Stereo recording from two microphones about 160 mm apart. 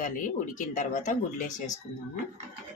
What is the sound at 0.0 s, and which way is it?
A woman's voice, 55° left (ahead or behind).